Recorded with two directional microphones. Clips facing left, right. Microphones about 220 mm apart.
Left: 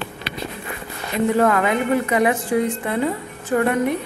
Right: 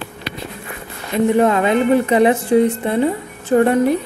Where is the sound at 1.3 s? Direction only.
20° right (ahead or behind).